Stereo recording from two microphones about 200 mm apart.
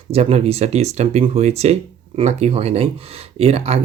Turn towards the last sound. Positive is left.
turn(degrees=-30)  # may be behind; listen again after turning